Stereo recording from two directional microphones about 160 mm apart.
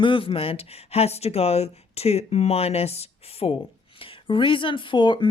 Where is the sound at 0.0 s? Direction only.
35° left (ahead or behind).